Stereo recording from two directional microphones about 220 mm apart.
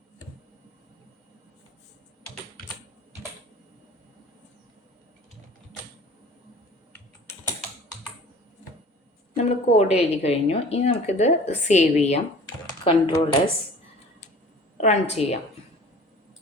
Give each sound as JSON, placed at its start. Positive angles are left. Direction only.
{"t": 9.3, "sound": "a woman's voice", "side_deg": 30}
{"t": 14.8, "sound": "a woman's voice", "side_deg": 30}